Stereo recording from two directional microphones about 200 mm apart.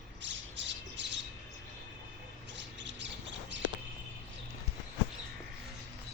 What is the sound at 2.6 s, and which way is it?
Squawk, 65° right (ahead or behind).